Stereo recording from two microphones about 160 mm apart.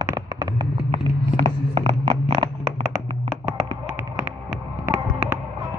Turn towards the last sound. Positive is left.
turn(degrees=-15)  # may be behind; listen again after turning